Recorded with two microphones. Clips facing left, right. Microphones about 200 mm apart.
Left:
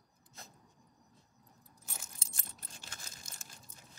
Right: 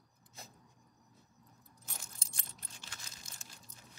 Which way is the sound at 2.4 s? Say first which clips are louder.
Left 2 dB; 40° left (ahead or behind).